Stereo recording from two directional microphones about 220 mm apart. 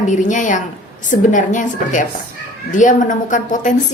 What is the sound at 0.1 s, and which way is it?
A woman's voice, 35° left (ahead or behind).